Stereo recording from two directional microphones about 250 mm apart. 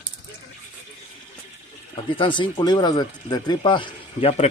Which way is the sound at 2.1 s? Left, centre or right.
Centre.